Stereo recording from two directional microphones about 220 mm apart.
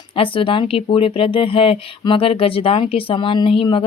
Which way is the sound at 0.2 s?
25° left (ahead or behind).